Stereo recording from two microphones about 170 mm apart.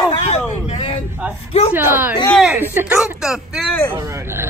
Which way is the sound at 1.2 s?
10° right (ahead or behind).